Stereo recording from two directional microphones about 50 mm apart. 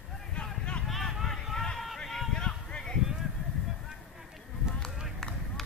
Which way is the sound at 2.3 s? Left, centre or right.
Centre.